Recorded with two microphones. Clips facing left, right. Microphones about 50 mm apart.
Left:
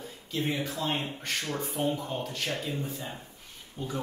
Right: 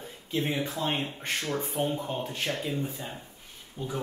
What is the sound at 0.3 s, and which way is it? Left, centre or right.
Speech, right.